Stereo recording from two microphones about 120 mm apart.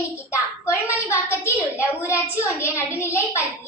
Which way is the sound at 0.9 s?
20° left (ahead or behind).